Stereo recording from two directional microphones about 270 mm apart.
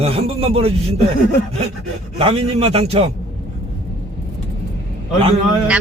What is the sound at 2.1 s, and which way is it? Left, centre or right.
Speech, right.